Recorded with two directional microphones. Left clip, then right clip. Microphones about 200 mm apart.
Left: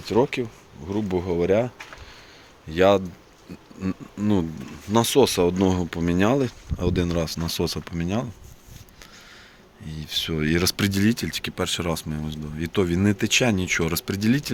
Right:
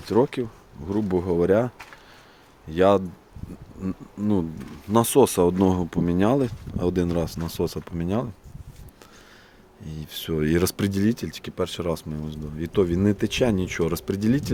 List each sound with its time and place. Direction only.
0.0 s speech: 25° right (ahead or behind)
2.6 s speech: 15° right (ahead or behind)
3.8 s speech: 5° right (ahead or behind)
4.9 s speech: 25° right (ahead or behind)
9.8 s speech: 20° right (ahead or behind)